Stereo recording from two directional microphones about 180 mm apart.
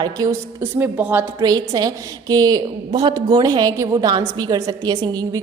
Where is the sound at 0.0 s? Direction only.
15° right (ahead or behind).